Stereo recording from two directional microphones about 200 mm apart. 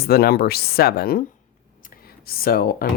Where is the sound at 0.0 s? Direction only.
50° left (ahead or behind).